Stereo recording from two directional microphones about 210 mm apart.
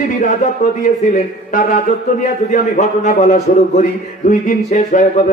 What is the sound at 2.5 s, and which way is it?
A man's voice, 35° left (ahead or behind).